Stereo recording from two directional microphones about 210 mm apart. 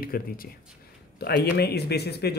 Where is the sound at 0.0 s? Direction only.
45° left (ahead or behind).